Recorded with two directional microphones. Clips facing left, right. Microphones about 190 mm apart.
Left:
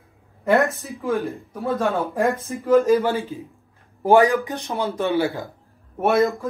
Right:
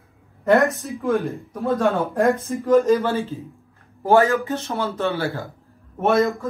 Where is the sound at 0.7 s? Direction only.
Centre (ahead or behind).